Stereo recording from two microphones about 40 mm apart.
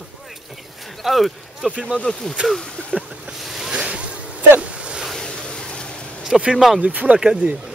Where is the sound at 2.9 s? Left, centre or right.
Right.